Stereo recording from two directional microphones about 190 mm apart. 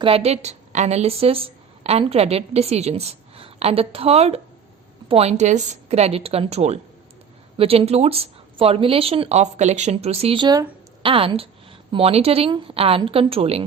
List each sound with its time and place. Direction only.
0.0 s a woman's voice: 30° right (ahead or behind)